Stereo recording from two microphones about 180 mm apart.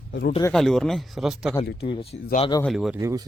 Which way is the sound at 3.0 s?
20° right (ahead or behind).